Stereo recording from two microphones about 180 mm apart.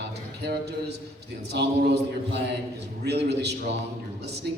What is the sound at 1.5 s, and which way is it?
A man's voice, 65° right (ahead or behind).